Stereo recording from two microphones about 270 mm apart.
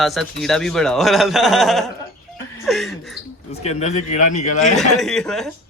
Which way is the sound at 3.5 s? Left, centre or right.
Left.